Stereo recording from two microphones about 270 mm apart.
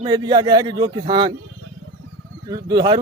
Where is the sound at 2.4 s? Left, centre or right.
Centre.